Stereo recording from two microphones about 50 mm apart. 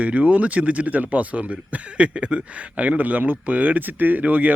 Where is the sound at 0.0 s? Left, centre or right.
Right.